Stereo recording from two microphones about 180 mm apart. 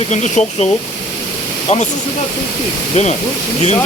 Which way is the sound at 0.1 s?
40° left (ahead or behind).